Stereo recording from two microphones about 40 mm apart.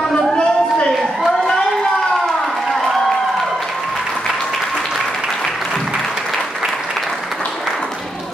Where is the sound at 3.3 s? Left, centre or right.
Centre.